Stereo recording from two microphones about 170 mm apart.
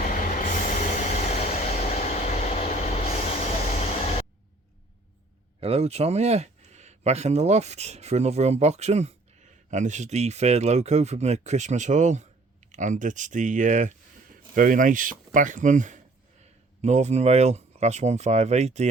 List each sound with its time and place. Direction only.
0.0 s train: 50° left (ahead or behind)
5.5 s speech: 35° right (ahead or behind)